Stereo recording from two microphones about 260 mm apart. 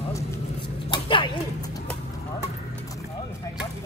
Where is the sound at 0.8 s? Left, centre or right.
Centre.